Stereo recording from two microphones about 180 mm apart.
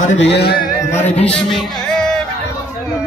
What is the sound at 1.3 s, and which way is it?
Music, centre (ahead or behind).